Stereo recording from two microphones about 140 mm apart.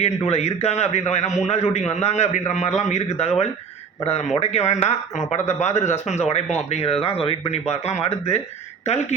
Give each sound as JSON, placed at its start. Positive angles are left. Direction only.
{"t": 0.0, "sound": "speech", "side_deg": 50}